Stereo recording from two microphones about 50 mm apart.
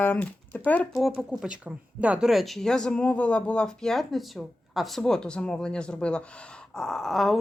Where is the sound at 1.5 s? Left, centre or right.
Right.